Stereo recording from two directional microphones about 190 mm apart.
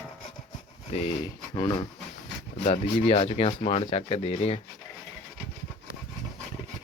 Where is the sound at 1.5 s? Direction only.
20° left (ahead or behind).